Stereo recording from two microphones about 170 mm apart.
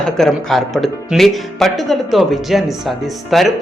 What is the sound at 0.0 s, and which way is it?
Speech, centre (ahead or behind).